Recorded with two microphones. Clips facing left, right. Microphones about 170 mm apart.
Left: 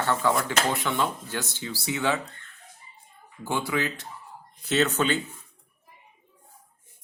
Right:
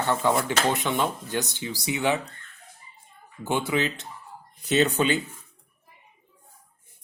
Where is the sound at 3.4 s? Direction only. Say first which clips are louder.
Right 2 dB; 20° right (ahead or behind).